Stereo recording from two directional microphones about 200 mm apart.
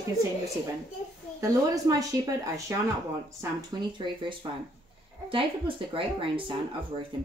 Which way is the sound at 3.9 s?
25° right (ahead or behind).